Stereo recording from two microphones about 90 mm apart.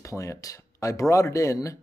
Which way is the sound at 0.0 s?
35° left (ahead or behind).